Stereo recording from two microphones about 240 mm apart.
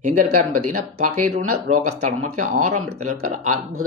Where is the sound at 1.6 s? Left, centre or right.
Right.